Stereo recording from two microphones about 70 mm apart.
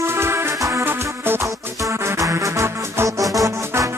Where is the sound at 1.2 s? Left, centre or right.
Right.